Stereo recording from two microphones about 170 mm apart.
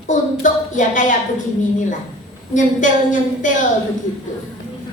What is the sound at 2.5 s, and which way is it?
A woman's voice, 50° left (ahead or behind).